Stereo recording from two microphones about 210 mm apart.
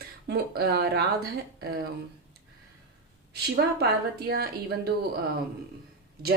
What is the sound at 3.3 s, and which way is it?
Speech, 50° right (ahead or behind).